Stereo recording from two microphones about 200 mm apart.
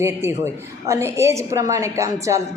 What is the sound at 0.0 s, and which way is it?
A woman's voice, 10° right (ahead or behind).